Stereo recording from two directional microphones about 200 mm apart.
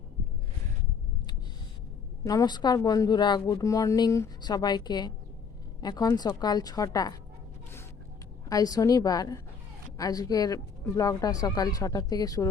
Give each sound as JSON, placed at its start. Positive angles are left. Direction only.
{"t": 2.2, "sound": "a woman's voice", "side_deg": 15}
{"t": 8.4, "sound": "speech", "side_deg": 20}